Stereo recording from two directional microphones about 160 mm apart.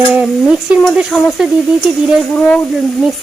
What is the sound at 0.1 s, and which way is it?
Speech, 5° right (ahead or behind).